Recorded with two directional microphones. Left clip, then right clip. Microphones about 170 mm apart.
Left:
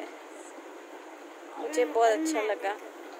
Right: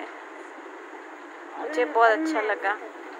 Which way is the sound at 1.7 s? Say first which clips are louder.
Right 4 dB; 15° left (ahead or behind).